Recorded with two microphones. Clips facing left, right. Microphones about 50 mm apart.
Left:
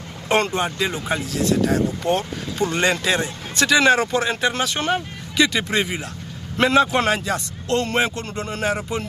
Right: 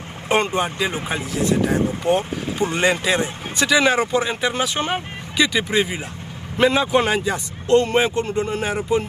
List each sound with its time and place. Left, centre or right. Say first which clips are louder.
0.3 s speech: even; centre